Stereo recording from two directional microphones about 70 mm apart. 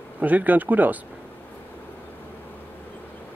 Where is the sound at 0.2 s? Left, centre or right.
Right.